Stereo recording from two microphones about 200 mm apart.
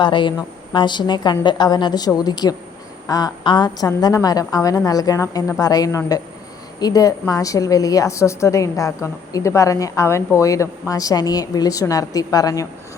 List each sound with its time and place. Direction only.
0.0 s a woman's voice: 25° left (ahead or behind)